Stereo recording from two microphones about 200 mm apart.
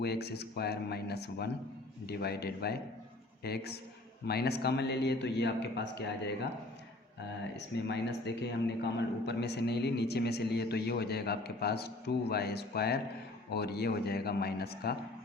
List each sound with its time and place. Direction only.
0.0 s a man's voice: 55° left (ahead or behind)
7.5 s a man's voice: 60° left (ahead or behind)